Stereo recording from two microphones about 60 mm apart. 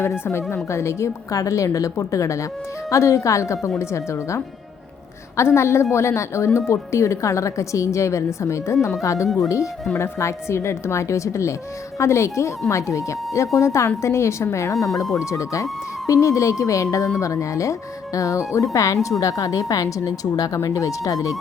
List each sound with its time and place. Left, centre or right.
0.5 s a woman's voice: left
5.4 s a woman's voice: left
9.9 s a woman's voice: left